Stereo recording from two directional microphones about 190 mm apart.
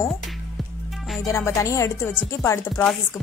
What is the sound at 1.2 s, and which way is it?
A woman's voice, 15° left (ahead or behind).